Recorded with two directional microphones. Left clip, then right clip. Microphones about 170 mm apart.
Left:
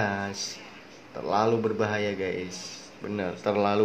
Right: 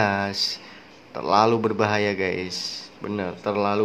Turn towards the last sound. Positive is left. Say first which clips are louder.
# right 2 dB
turn(degrees=-10)  # may be behind; listen again after turning